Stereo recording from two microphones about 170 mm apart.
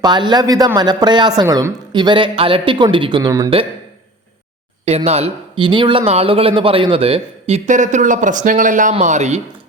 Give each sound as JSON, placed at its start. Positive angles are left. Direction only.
{"t": 0.0, "sound": "speech", "side_deg": -25}
{"t": 4.9, "sound": "speech", "side_deg": -35}